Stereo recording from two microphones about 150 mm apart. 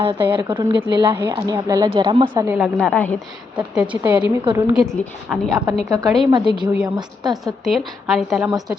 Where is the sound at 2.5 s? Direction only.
15° right (ahead or behind).